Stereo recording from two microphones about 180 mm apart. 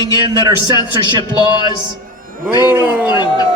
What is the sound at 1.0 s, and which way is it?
Speech, 25° right (ahead or behind).